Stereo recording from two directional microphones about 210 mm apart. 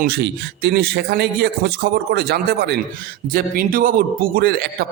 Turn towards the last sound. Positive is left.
turn(degrees=-45)  # may be behind; listen again after turning